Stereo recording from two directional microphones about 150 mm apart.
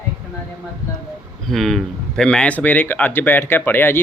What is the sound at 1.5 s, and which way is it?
Speech, centre (ahead or behind).